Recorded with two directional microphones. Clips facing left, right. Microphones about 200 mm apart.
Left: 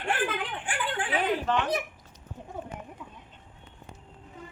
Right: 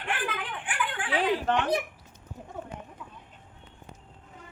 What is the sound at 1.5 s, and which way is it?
Speech, 55° right (ahead or behind).